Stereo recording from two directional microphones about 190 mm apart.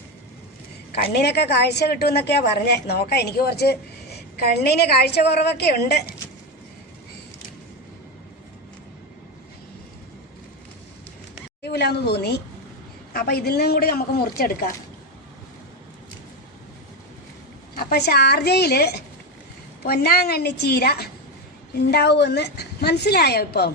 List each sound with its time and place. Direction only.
0.9 s a woman's voice: 60° left (ahead or behind)
11.6 s a woman's voice: 60° left (ahead or behind)
17.7 s a woman's voice: 55° left (ahead or behind)